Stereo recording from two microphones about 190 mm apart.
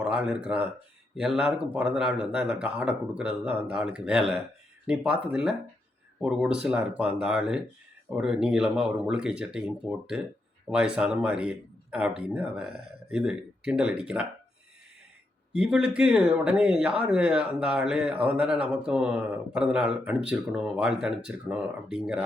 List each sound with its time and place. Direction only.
0.0 s speech: 5° right (ahead or behind)
15.5 s speech: 5° right (ahead or behind)